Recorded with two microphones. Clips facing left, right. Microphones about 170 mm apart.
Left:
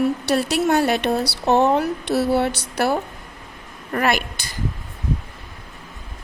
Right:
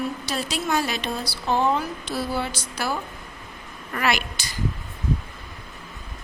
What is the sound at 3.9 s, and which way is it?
Speech, 45° left (ahead or behind).